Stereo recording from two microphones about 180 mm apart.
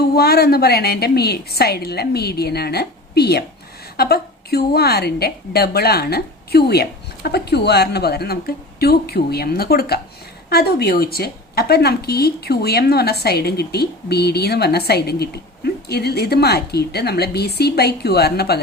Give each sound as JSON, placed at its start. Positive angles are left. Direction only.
{"t": 0.2, "sound": "a woman's voice", "side_deg": 60}